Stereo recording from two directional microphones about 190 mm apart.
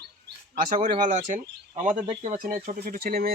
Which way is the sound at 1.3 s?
40° right (ahead or behind).